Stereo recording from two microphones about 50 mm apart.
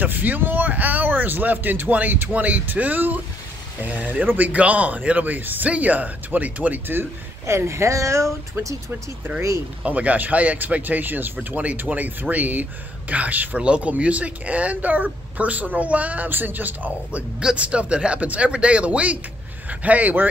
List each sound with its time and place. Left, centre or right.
0.0 s speech: right
7.4 s speech: right
8.6 s speech: right
9.8 s speech: right
13.6 s speech: right
17.6 s speech: right